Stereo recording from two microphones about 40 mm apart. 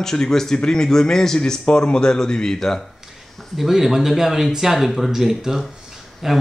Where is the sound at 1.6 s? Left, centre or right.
Left.